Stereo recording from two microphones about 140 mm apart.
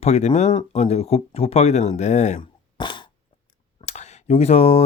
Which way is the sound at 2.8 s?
35° left (ahead or behind).